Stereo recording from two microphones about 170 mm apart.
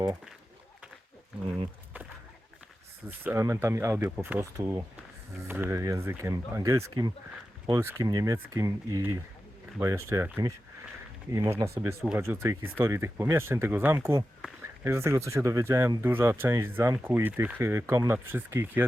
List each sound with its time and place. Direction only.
3.1 s speech: 15° right (ahead or behind)